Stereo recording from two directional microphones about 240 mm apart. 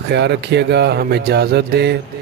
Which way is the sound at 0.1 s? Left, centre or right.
Right.